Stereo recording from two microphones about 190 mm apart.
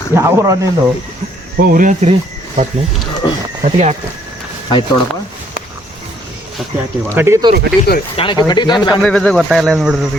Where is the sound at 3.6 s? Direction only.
35° right (ahead or behind).